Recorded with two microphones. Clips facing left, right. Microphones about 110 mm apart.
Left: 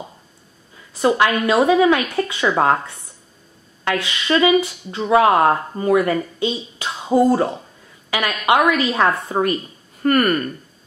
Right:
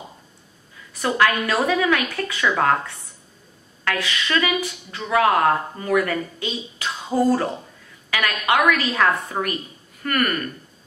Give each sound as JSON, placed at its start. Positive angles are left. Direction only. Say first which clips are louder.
{"t": 0.9, "sound": "speech", "louder": "left 3 dB", "side_deg": 25}